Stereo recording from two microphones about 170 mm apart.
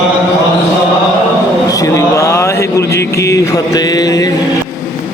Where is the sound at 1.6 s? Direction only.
20° left (ahead or behind).